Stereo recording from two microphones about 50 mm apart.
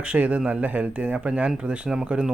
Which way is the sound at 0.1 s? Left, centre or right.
Right.